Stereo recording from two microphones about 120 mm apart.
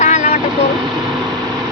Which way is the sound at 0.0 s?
80° left.